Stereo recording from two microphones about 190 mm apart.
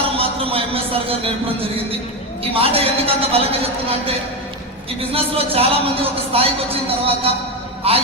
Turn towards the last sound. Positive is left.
turn(degrees=-30)  # may be behind; listen again after turning